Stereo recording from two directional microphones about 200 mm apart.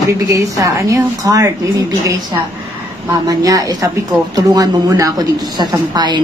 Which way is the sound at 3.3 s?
15° right (ahead or behind).